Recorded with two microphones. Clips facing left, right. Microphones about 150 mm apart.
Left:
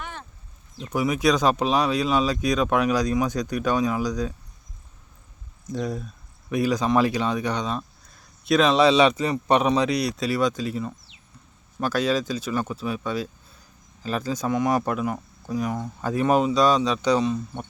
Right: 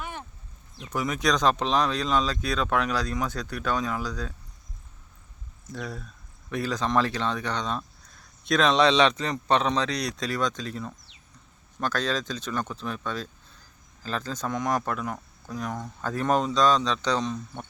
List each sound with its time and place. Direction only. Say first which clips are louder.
0.0 s a sound: even; 15° right (ahead or behind)
0.9 s speech: left 5 dB; 10° left (ahead or behind)
5.7 s speech: left 8 dB; 20° left (ahead or behind)